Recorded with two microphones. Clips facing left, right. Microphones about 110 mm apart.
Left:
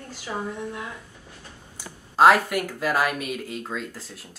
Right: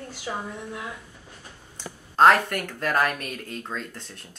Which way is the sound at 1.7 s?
5° left (ahead or behind).